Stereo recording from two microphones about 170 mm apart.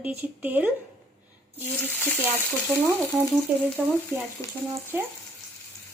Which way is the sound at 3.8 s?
10° right (ahead or behind).